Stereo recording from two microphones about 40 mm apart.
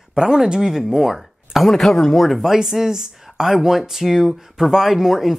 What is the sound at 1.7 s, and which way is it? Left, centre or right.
Speech, centre.